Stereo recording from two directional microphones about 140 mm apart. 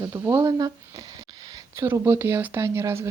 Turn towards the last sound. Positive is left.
turn(degrees=-20)  # may be behind; listen again after turning